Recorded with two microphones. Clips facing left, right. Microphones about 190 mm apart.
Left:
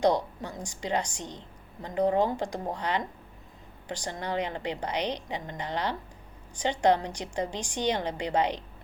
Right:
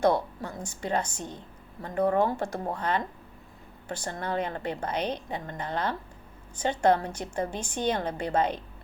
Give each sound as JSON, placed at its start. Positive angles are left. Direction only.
{"t": 0.0, "sound": "a woman's voice", "side_deg": 15}